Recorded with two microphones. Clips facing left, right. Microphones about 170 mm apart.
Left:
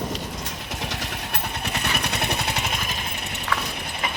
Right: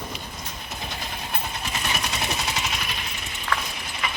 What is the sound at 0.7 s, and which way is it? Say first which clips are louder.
Vehicle: left 3 dB; 80° left.